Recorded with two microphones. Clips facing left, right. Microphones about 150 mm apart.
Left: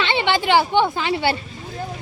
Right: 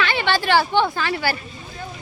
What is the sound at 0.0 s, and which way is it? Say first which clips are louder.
Speech: left 1 dB; 20° left (ahead or behind).